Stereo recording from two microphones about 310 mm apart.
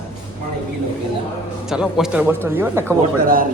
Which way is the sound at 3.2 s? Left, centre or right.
Right.